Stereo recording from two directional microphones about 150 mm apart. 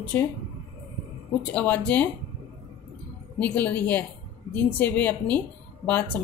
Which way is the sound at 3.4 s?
10° left (ahead or behind).